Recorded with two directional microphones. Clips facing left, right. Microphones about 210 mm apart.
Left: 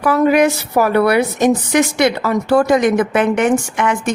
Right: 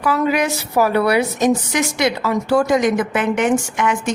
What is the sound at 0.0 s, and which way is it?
A woman's voice, 50° left (ahead or behind).